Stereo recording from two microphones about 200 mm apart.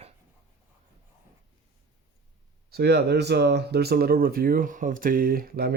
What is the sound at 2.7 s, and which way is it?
Speech, 55° right (ahead or behind).